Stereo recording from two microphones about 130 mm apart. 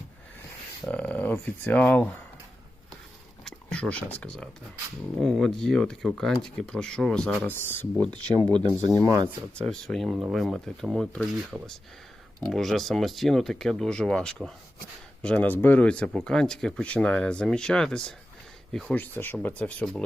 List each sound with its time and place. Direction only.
0.9 s speech: 10° left (ahead or behind)
3.4 s speech: 10° left (ahead or behind)
7.5 s speech: 15° left (ahead or behind)
9.0 s speech: 30° right (ahead or behind)
9.6 s speech: 5° left (ahead or behind)